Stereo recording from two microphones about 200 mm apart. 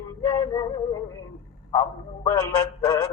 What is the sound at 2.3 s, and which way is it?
Synthetic singing, 15° left (ahead or behind).